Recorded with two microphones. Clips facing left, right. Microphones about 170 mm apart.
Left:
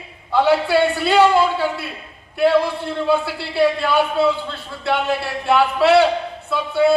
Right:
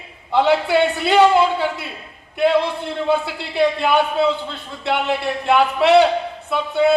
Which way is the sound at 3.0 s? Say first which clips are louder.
Left 1 dB; 20° right (ahead or behind).